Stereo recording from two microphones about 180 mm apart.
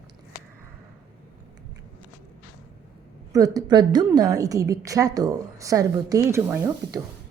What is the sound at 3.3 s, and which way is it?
A woman's voice, 20° right (ahead or behind).